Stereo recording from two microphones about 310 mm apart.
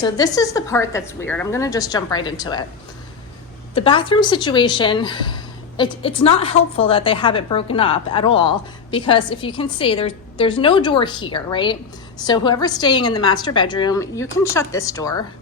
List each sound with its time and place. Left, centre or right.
0.0 s speech: centre
3.8 s speech: centre